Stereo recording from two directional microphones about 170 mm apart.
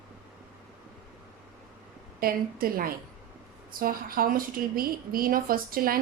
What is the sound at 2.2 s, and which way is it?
Speech, 60° right (ahead or behind).